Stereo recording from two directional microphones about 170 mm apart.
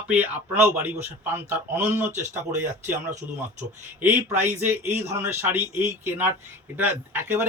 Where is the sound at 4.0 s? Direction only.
10° right (ahead or behind).